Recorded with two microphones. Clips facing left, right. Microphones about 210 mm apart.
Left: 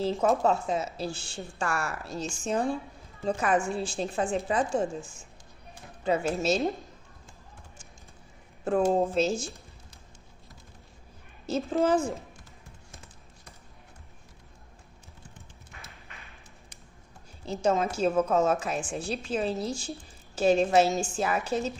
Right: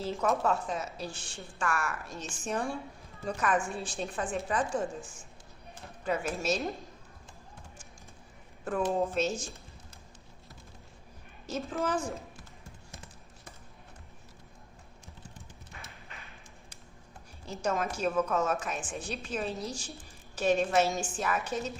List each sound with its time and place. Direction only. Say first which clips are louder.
0.0 s a woman's voice: left 5 dB; 30° left (ahead or behind)
6.1 s a woman's voice: left 5 dB; 30° left (ahead or behind)
8.6 s a woman's voice: left 5 dB; 30° left (ahead or behind)
11.4 s a woman's voice: left 7 dB; 30° left (ahead or behind)
17.4 s a woman's voice: left 6 dB; 30° left (ahead or behind)